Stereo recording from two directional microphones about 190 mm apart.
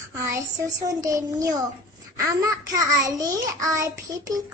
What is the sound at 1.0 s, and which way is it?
Child singing, 15° right (ahead or behind).